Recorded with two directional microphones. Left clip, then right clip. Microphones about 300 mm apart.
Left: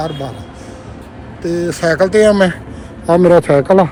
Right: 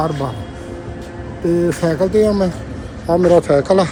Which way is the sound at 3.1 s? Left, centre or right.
Left.